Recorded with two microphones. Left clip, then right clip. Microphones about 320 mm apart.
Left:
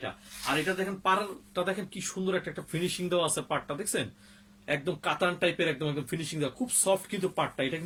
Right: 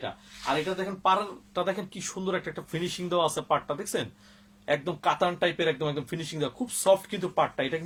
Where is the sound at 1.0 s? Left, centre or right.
Centre.